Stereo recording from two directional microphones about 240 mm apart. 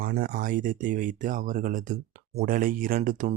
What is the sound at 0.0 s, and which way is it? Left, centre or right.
Speech, right.